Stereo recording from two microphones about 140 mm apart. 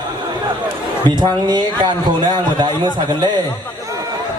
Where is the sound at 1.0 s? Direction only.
35° right (ahead or behind).